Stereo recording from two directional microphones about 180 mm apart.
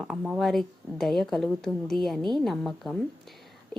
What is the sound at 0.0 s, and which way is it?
Speech, centre (ahead or behind).